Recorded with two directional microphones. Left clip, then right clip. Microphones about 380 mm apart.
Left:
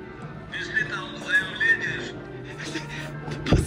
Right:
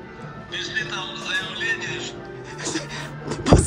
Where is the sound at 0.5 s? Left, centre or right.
Centre.